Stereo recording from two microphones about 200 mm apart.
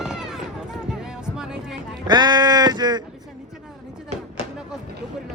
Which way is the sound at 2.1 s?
20° right (ahead or behind).